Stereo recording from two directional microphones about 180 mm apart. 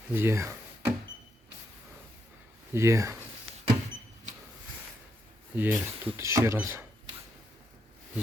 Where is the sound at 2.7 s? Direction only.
15° right (ahead or behind).